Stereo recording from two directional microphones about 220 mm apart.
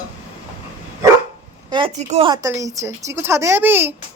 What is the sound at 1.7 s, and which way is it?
Speech, 20° right (ahead or behind).